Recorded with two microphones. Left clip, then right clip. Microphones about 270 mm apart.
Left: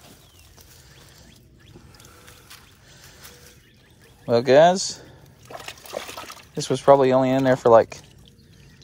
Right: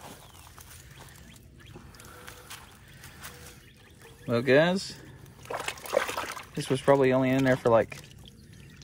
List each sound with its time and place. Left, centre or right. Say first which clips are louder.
4.3 s speech: left 8 dB; centre
5.5 s trickle: right 5 dB; centre
6.7 s speech: left 7 dB; centre